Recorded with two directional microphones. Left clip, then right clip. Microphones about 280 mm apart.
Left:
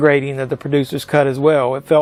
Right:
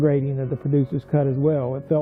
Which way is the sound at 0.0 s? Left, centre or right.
Centre.